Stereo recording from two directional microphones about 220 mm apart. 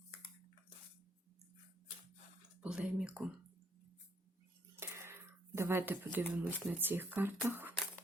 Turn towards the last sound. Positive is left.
turn(degrees=-10)  # may be behind; listen again after turning